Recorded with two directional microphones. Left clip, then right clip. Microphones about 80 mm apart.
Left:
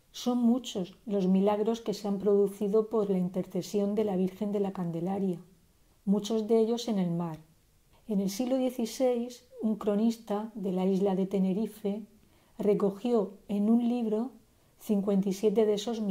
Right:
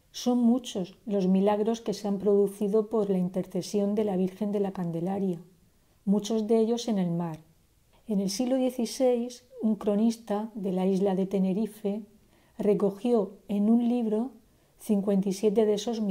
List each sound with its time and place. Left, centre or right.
0.1 s speech: right